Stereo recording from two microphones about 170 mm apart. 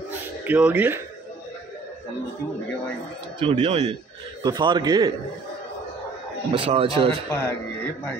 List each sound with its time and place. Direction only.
0.5 s speech: 10° right (ahead or behind)
3.3 s speech: 35° right (ahead or behind)
4.4 s a man's voice: 25° right (ahead or behind)
6.5 s speech: 30° right (ahead or behind)
7.2 s speech: 10° left (ahead or behind)